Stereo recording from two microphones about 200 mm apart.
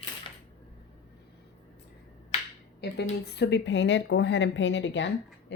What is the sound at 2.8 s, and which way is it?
Speech, 55° left (ahead or behind).